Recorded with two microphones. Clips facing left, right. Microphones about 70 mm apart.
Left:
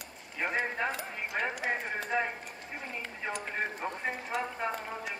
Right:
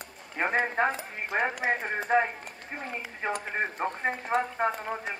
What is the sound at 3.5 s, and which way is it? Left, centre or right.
Speech, right.